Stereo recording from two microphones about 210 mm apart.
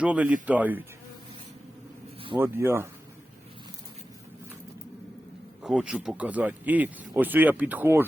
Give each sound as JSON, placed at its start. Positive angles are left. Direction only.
{"t": 0.0, "sound": "speech", "side_deg": -5}
{"t": 2.3, "sound": "speech", "side_deg": -10}
{"t": 5.6, "sound": "speech", "side_deg": -5}